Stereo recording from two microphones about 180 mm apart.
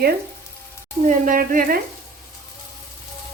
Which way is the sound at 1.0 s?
50° right (ahead or behind).